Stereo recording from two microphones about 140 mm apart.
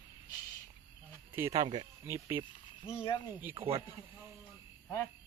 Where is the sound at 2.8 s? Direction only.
40° left (ahead or behind).